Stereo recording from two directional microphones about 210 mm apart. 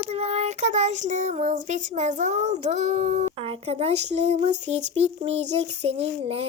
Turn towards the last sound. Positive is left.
turn(degrees=-30)  # may be behind; listen again after turning